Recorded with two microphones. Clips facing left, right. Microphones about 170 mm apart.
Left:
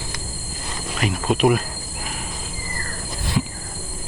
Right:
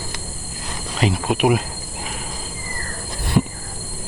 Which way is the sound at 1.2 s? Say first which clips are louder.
Left 2 dB; 10° right (ahead or behind).